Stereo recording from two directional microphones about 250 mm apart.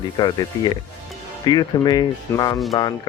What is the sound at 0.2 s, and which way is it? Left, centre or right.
Speech, centre.